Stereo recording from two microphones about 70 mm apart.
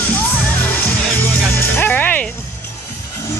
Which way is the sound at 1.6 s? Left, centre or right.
Left.